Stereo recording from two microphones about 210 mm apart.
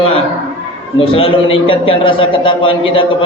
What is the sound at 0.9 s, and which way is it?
Speech, 25° left (ahead or behind).